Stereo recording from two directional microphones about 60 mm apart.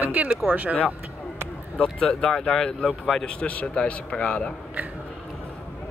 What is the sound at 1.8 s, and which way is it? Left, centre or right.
Speech, centre.